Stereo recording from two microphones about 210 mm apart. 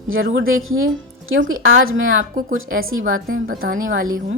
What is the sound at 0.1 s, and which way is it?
A woman's voice, 70° right (ahead or behind).